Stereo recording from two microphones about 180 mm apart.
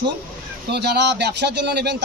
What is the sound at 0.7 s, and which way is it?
A man's voice, 65° right (ahead or behind).